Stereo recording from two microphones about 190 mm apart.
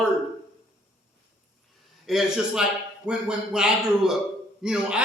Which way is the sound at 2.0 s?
Centre (ahead or behind).